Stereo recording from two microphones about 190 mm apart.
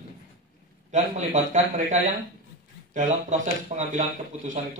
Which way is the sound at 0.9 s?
40° right (ahead or behind).